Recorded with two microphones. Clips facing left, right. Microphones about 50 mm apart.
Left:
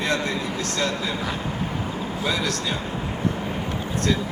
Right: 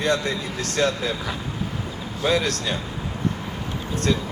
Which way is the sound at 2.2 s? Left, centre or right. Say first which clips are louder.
Right 4 dB; right.